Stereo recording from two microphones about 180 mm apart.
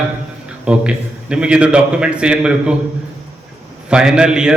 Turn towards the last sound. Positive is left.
turn(degrees=-5)  # may be behind; listen again after turning